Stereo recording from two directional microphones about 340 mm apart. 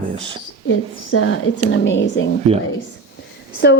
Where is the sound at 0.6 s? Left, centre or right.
Left.